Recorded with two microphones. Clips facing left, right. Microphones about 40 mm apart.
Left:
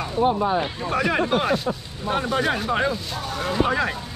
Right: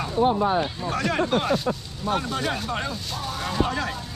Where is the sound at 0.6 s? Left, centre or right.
Centre.